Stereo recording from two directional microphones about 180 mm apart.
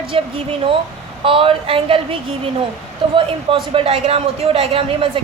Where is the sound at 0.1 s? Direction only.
30° right (ahead or behind).